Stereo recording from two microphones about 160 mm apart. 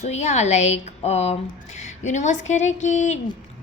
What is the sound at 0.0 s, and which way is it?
A woman's voice, 45° left (ahead or behind).